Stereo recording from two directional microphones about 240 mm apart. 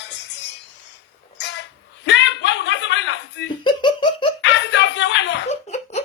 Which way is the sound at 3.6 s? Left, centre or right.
Centre.